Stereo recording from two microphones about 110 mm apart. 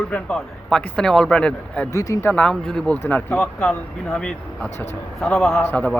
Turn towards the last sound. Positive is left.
turn(degrees=15)  # may be behind; listen again after turning